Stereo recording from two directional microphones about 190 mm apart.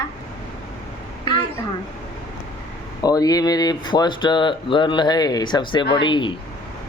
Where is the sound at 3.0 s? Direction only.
20° left (ahead or behind).